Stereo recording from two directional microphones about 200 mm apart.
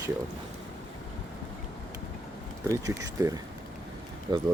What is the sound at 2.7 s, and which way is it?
Speech, 15° right (ahead or behind).